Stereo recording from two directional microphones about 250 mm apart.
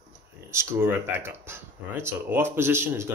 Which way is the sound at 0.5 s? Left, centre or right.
Centre.